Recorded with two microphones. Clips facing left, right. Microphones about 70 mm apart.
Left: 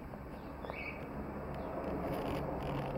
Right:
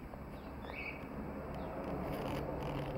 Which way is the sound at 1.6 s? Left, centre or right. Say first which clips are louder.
Left 3 dB; centre.